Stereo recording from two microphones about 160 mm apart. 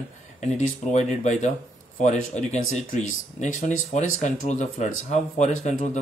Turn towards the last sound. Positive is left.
turn(degrees=45)  # may be behind; listen again after turning